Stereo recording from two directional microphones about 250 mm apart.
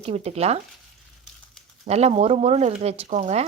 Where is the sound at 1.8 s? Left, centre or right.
Right.